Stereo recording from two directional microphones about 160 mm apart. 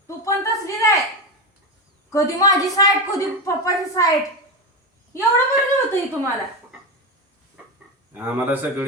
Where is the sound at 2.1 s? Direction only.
20° left (ahead or behind).